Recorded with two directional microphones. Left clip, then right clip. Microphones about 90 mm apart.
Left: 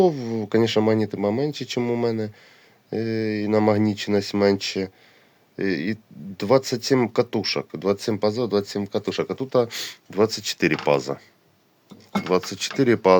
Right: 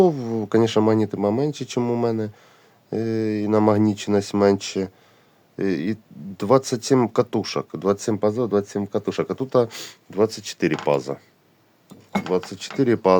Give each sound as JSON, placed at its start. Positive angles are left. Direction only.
{"t": 0.0, "sound": "speech", "side_deg": -55}
{"t": 9.6, "sound": "speech", "side_deg": -40}
{"t": 10.1, "sound": "speech", "side_deg": -5}
{"t": 12.5, "sound": "speech", "side_deg": 0}
{"t": 12.7, "sound": "speech", "side_deg": -15}